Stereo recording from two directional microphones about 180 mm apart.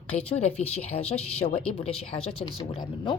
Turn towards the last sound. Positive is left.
turn(degrees=30)  # may be behind; listen again after turning